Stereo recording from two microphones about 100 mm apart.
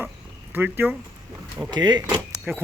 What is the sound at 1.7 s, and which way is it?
Speech, 45° right (ahead or behind).